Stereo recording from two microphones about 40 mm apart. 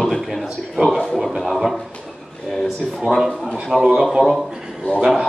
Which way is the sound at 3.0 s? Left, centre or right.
Centre.